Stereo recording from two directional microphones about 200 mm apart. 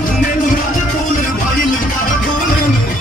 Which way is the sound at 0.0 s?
40° left (ahead or behind).